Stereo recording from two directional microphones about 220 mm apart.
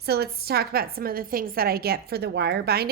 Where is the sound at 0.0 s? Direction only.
45° right (ahead or behind).